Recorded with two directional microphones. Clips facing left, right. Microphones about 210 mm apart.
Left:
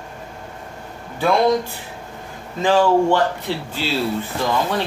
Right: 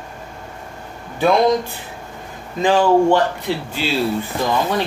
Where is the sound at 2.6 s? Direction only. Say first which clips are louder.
Right 1 dB; 15° right (ahead or behind).